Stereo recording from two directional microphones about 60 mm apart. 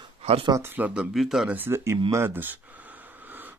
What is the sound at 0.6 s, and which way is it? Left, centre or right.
Speech, right.